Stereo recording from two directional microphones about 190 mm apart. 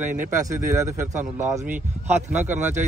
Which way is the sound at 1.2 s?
40° right (ahead or behind).